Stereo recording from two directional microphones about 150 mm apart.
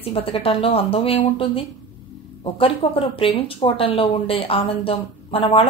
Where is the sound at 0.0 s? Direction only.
40° left (ahead or behind).